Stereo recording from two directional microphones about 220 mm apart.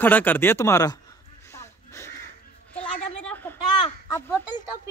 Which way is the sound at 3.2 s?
5° left (ahead or behind).